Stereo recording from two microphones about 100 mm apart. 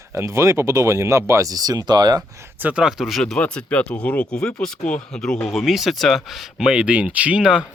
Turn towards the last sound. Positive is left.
turn(degrees=-10)  # may be behind; listen again after turning